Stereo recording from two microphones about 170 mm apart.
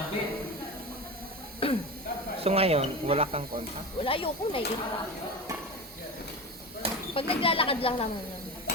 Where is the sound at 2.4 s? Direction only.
35° right (ahead or behind).